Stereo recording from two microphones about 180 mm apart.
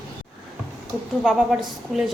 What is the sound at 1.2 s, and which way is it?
Speech, 5° right (ahead or behind).